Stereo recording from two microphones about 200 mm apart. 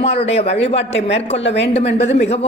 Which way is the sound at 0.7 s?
65° left (ahead or behind).